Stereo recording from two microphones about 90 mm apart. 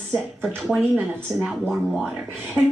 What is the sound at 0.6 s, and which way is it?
Speech, 5° right (ahead or behind).